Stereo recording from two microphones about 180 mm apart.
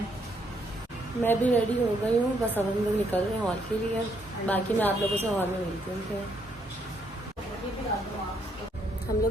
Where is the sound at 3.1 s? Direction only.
10° left (ahead or behind).